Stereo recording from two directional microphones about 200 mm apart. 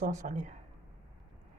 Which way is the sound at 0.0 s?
40° right (ahead or behind).